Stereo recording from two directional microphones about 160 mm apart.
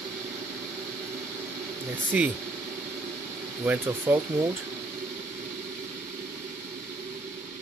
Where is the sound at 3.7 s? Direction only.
15° right (ahead or behind).